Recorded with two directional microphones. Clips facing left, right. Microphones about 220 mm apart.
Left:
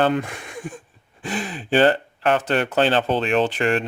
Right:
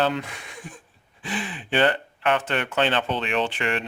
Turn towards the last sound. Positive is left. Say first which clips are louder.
# left 6 dB
turn(degrees=45)  # may be behind; listen again after turning